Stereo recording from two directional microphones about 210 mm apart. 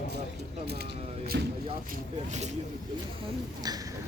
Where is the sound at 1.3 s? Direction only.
60° right (ahead or behind).